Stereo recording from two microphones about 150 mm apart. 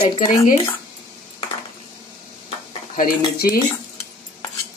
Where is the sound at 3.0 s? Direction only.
75° left (ahead or behind).